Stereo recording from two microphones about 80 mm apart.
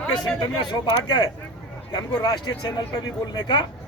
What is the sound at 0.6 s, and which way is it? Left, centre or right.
Speech, left.